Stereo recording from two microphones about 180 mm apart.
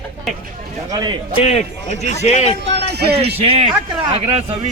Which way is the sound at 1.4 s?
35° left (ahead or behind).